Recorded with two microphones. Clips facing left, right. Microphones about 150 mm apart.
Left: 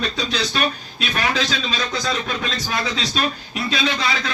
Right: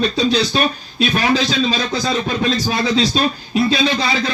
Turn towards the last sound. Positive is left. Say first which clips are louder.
# right 5 dB
turn(degrees=-30)  # may be behind; listen again after turning